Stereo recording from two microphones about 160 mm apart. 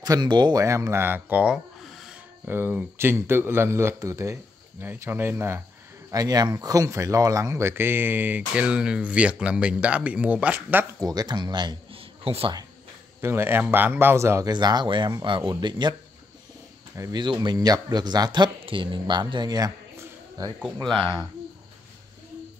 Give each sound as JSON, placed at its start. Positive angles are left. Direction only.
{"t": 0.0, "sound": "speech", "side_deg": -25}
{"t": 11.0, "sound": "speech", "side_deg": -25}
{"t": 13.2, "sound": "speech", "side_deg": -15}
{"t": 20.6, "sound": "speech", "side_deg": 5}